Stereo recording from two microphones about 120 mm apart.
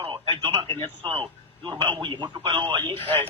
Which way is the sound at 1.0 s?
45° right (ahead or behind).